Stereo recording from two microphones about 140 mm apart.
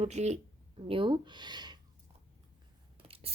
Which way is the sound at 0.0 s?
55° right (ahead or behind).